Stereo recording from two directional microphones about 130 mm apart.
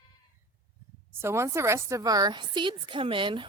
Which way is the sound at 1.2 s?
20° right (ahead or behind).